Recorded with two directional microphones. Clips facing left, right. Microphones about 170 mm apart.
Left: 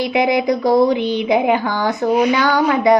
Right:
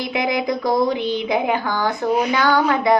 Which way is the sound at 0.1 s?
20° left (ahead or behind).